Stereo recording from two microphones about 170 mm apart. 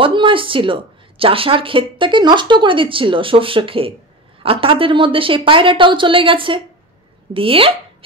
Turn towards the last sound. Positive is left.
turn(degrees=-30)  # may be behind; listen again after turning